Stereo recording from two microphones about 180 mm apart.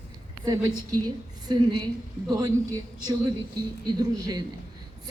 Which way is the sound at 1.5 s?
25° right (ahead or behind).